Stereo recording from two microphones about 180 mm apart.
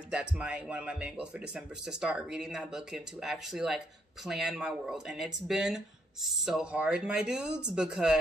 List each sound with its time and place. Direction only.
0.1 s speech: 5° right (ahead or behind)